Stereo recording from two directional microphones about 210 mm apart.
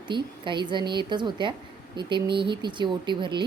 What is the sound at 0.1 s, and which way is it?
Speech, 20° right (ahead or behind).